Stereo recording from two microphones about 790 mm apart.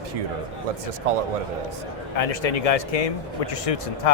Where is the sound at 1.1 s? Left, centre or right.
Right.